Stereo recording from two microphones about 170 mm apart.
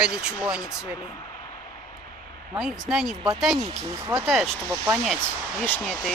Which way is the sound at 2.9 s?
Centre (ahead or behind).